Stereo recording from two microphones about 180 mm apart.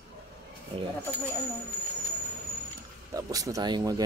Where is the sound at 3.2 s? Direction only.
20° right (ahead or behind).